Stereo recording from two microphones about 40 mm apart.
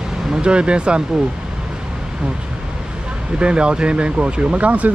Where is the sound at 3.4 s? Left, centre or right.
Right.